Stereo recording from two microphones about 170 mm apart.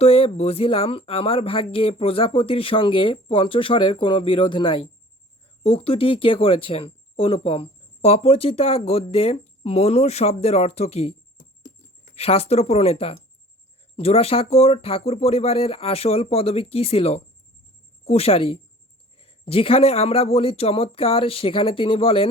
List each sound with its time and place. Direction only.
0.0 s speech: 35° left (ahead or behind)